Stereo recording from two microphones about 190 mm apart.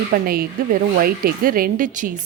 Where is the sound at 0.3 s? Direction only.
50° right (ahead or behind).